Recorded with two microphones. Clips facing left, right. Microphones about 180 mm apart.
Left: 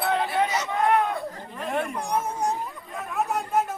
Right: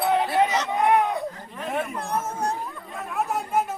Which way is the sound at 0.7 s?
15° right (ahead or behind).